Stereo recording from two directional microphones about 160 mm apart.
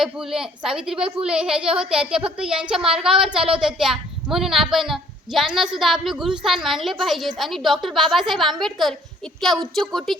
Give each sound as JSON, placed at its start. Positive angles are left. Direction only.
{"t": 0.0, "sound": "speech", "side_deg": -5}